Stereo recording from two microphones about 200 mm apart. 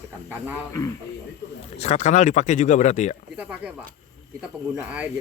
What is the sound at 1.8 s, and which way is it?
Speech, 35° left (ahead or behind).